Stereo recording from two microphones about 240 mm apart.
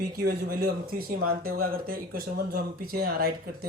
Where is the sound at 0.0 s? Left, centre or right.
Right.